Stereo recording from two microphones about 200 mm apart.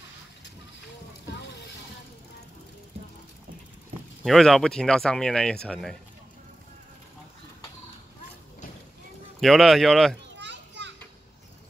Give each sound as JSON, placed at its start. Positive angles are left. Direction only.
{"t": 4.2, "sound": "speech", "side_deg": 0}
{"t": 9.4, "sound": "speech", "side_deg": 0}
{"t": 10.3, "sound": "children playing", "side_deg": -60}